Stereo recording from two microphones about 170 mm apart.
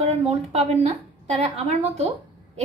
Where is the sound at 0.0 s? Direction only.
35° right (ahead or behind).